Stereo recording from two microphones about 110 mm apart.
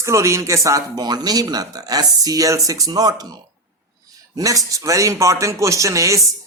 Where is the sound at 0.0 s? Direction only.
25° right (ahead or behind).